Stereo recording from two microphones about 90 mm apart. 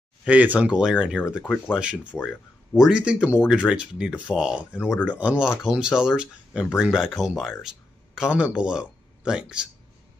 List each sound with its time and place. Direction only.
0.2 s speech: 15° right (ahead or behind)
7.6 s a sound: 5° right (ahead or behind)
8.5 s speech: 10° right (ahead or behind)